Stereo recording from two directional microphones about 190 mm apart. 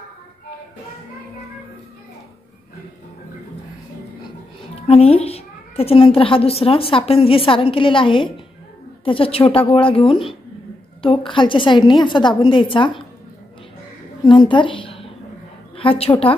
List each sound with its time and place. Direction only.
4.8 s a woman's voice: 30° left (ahead or behind)
14.2 s a woman's voice: 25° left (ahead or behind)